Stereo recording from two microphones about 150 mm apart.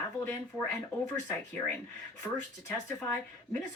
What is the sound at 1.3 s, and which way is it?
Speech, 10° left (ahead or behind).